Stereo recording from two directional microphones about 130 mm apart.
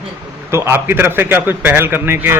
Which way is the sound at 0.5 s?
20° right (ahead or behind).